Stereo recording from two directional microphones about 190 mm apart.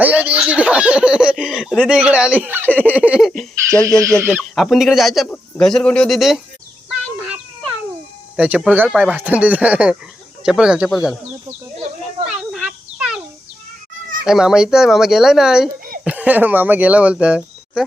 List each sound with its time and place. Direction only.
0.0 s speech: 10° right (ahead or behind)
3.8 s speech: 15° right (ahead or behind)
4.5 s speech: centre (ahead or behind)
7.3 s cat: 5° right (ahead or behind)
8.4 s speech: 5° right (ahead or behind)
12.3 s a sound: 5° right (ahead or behind)
14.3 s speech: 5° right (ahead or behind)